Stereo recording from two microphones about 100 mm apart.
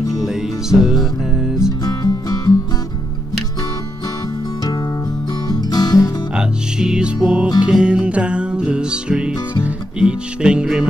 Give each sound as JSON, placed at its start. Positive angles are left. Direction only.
{"t": 0.2, "sound": "music", "side_deg": 0}
{"t": 2.0, "sound": "music", "side_deg": 40}
{"t": 5.5, "sound": "music", "side_deg": 40}
{"t": 6.3, "sound": "music", "side_deg": -10}